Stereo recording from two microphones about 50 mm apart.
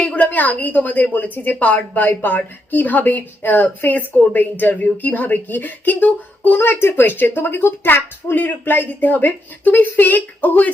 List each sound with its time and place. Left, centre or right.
0.0 s a woman's voice: left